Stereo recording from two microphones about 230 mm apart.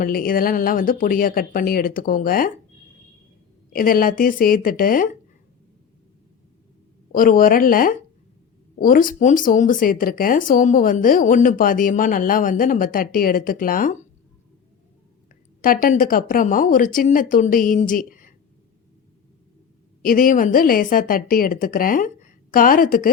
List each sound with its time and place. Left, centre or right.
0.0 s speech: left
3.7 s speech: left
7.1 s speech: left
15.6 s speech: left
20.0 s speech: left